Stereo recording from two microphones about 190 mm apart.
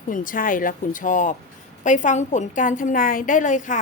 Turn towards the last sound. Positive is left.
turn(degrees=40)  # may be behind; listen again after turning